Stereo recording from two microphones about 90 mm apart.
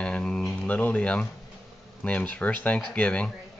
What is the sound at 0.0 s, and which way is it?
Mantra, 10° left (ahead or behind).